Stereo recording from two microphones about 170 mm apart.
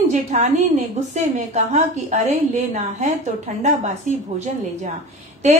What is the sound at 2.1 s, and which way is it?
A woman's voice, 45° right (ahead or behind).